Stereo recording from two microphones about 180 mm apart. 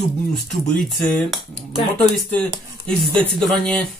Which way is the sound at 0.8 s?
Centre (ahead or behind).